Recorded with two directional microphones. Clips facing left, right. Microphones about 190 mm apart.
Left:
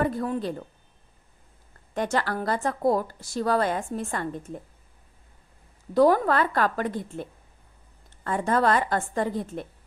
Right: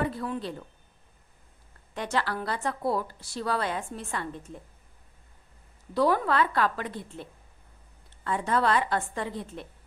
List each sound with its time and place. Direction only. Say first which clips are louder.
0.0 s speech: left 4 dB; 45° left (ahead or behind)
2.0 s speech: left 4 dB; 45° left (ahead or behind)
5.9 s speech: left 5 dB; 45° left (ahead or behind)